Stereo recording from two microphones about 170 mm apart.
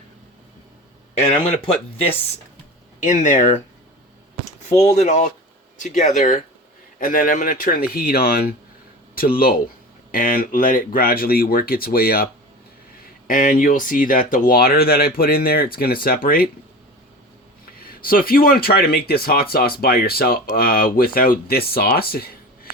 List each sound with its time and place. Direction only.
1.1 s speech: 35° left (ahead or behind)
3.0 s speech: 45° left (ahead or behind)
4.9 s speech: 45° left (ahead or behind)
17.8 s speech: 55° left (ahead or behind)